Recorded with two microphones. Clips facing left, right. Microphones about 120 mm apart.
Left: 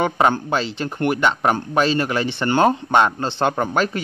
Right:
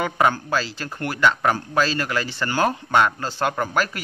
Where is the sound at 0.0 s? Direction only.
25° left (ahead or behind).